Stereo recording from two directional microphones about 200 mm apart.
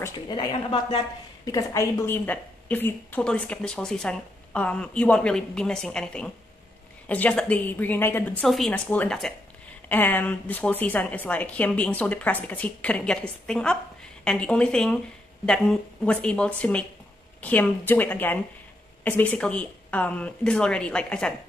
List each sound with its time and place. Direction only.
0.0 s a woman's voice: 20° left (ahead or behind); by 21.3 s 5° left (ahead or behind)